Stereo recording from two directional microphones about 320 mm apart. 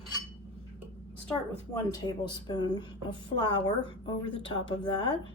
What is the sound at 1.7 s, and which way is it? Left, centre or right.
Speech, centre.